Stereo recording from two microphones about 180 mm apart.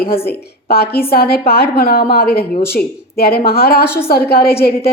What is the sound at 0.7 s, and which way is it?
A woman's voice, 60° left (ahead or behind).